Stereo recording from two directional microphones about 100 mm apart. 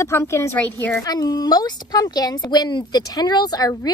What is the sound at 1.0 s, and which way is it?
A woman's voice, 40° left (ahead or behind).